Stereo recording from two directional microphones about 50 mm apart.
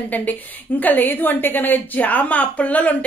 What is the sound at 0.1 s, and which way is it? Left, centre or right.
A woman's voice, left.